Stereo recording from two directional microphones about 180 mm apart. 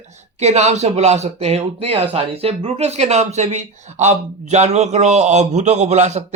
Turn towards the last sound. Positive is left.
turn(degrees=-40)  # may be behind; listen again after turning